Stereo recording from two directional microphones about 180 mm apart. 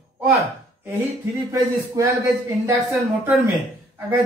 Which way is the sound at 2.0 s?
20° right (ahead or behind).